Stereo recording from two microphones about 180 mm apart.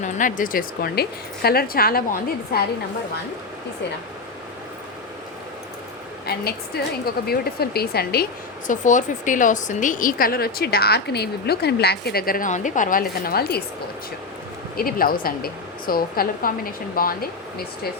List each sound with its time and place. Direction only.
0.0 s a woman's voice: 45° left (ahead or behind)
6.2 s a woman's voice: 60° left (ahead or behind)
14.8 s a woman's voice: 55° left (ahead or behind)